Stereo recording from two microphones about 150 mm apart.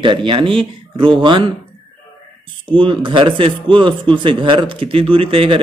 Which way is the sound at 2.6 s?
35° right (ahead or behind).